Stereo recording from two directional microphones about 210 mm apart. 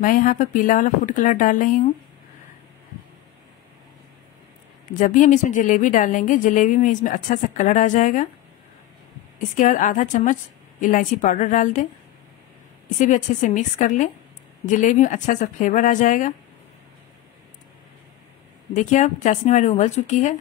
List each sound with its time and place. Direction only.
0.0 s speech: 40° left (ahead or behind)
4.9 s speech: 40° left (ahead or behind)
9.4 s speech: 40° left (ahead or behind)
13.0 s speech: 35° left (ahead or behind)
18.7 s speech: 35° left (ahead or behind)